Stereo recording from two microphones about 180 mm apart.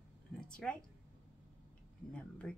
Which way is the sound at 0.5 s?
5° left (ahead or behind).